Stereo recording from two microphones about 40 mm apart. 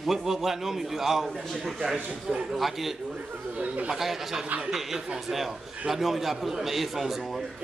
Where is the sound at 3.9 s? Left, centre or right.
Centre.